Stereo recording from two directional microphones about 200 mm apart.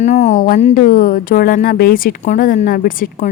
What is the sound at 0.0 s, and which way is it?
Speech, 35° left (ahead or behind).